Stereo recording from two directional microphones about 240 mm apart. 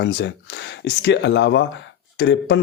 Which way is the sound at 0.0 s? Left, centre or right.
Left.